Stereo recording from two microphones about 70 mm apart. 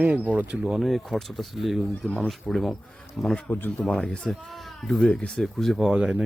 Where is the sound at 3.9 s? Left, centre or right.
Centre.